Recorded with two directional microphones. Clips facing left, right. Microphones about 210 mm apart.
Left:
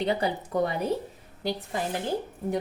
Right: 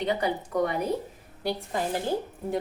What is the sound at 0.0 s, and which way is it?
Speech, 30° left (ahead or behind).